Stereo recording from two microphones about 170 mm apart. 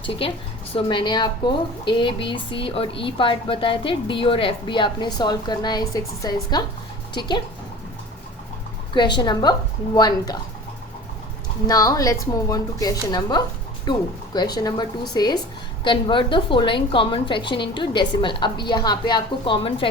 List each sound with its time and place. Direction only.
0.0 s a woman's voice: 30° left (ahead or behind)
8.9 s speech: 25° left (ahead or behind)
11.6 s speech: 20° left (ahead or behind)